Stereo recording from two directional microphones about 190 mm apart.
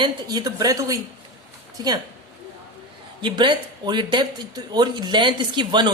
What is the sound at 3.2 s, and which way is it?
A man's voice, 25° right (ahead or behind).